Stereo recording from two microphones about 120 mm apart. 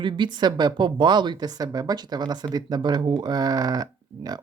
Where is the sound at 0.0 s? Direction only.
40° right (ahead or behind).